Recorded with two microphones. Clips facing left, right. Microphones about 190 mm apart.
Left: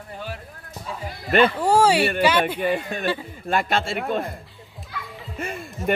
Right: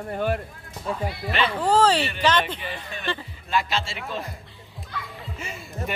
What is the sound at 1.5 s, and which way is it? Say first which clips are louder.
Speech: left 2 dB; 10° left (ahead or behind).